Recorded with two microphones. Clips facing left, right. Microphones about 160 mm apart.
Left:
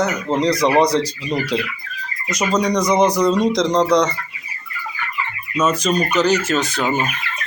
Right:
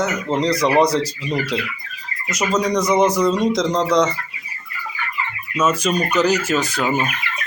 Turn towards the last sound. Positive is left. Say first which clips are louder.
# even
turn(degrees=-5)  # may be behind; listen again after turning